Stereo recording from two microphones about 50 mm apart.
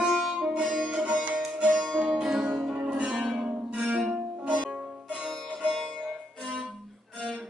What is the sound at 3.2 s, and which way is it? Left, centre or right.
Music, centre.